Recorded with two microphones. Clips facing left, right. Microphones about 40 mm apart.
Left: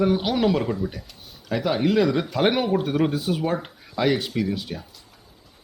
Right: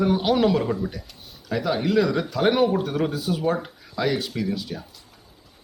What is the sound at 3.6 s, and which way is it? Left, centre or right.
Speech, left.